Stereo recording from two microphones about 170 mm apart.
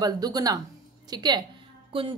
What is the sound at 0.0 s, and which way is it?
A woman's voice, 20° right (ahead or behind).